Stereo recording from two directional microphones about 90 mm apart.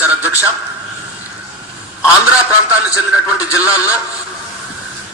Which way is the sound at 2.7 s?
15° right (ahead or behind).